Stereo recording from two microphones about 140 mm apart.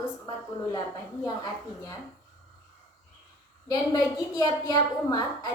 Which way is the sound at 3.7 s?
30° left (ahead or behind).